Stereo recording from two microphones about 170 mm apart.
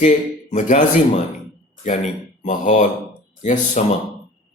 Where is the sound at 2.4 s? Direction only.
45° left (ahead or behind).